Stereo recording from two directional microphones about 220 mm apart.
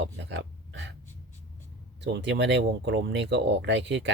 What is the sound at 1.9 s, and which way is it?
Speech, 50° right (ahead or behind).